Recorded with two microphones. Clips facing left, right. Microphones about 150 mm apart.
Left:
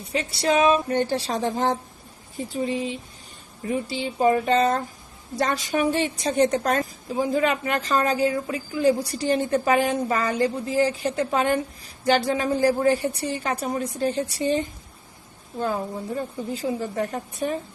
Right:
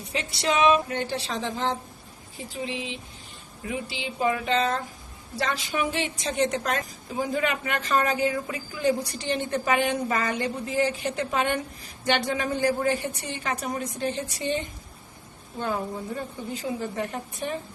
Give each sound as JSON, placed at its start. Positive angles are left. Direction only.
{"t": 0.1, "sound": "a woman's voice", "side_deg": 35}
{"t": 16.5, "sound": "a woman's voice", "side_deg": 35}